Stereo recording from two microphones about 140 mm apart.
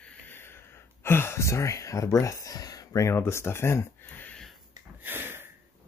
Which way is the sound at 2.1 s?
25° left (ahead or behind).